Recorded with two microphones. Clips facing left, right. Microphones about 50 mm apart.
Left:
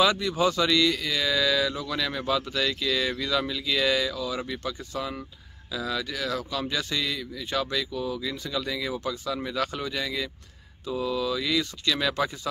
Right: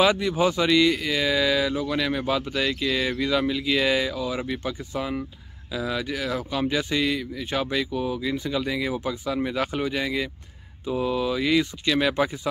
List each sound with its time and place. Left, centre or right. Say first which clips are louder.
0.0 s speech: right 2 dB; right